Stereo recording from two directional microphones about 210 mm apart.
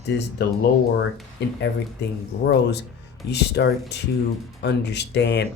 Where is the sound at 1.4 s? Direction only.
55° left (ahead or behind).